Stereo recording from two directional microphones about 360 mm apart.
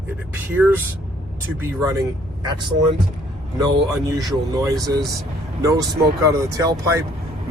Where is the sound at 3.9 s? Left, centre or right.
Centre.